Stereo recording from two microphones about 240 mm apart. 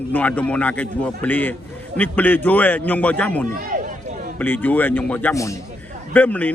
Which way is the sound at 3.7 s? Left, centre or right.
Right.